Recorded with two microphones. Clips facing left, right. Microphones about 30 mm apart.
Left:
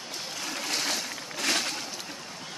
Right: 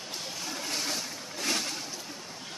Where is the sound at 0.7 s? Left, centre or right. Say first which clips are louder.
Left 4 dB; left.